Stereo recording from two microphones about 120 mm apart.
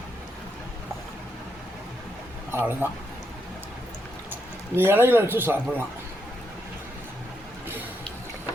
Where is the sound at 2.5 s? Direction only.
15° right (ahead or behind).